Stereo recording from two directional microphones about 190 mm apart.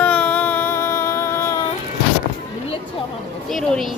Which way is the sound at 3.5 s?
Centre (ahead or behind).